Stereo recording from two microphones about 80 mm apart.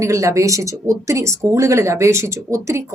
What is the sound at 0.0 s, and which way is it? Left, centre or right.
Speech, right.